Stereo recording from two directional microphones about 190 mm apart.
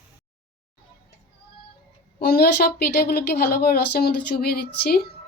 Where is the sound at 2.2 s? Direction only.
55° left (ahead or behind).